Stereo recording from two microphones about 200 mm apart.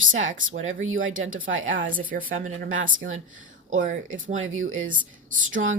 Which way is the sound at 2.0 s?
45° right (ahead or behind).